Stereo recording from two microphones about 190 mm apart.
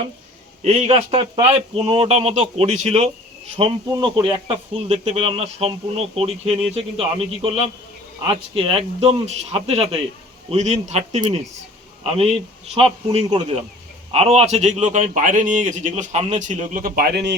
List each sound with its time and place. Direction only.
0.6 s speech: 35° right (ahead or behind)
3.6 s speech: 25° right (ahead or behind); by 17.3 s 60° right (ahead or behind)